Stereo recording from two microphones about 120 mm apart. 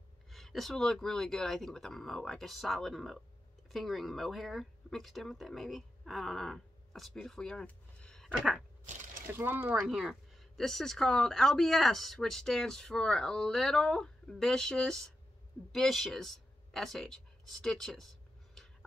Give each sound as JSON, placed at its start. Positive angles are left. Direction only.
{"t": 0.3, "sound": "speech", "side_deg": 0}
{"t": 9.3, "sound": "speech", "side_deg": -15}
{"t": 9.8, "sound": "speech", "side_deg": -5}
{"t": 15.7, "sound": "a sound", "side_deg": 0}